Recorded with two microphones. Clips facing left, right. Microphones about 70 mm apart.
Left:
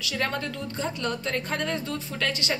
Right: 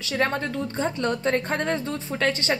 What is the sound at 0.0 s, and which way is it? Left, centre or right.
A woman's voice, right.